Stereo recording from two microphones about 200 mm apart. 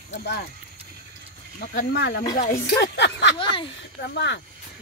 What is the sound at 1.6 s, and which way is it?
Speech, 50° left (ahead or behind).